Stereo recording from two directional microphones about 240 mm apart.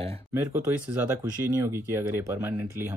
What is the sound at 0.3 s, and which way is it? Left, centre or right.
Speech, centre.